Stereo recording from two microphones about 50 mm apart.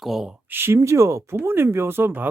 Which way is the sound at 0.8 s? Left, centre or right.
Right.